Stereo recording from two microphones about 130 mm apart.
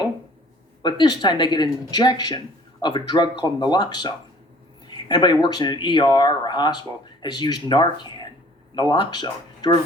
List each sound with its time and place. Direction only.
0.8 s speech: 35° left (ahead or behind)